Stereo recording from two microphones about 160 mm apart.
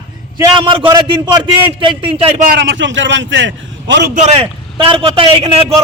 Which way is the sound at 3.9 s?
90° right.